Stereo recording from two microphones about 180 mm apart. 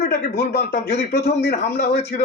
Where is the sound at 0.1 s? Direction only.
55° left (ahead or behind).